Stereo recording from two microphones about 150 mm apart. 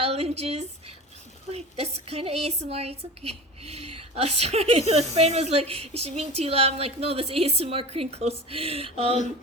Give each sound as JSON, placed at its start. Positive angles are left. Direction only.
{"t": 0.0, "sound": "a woman's voice", "side_deg": -45}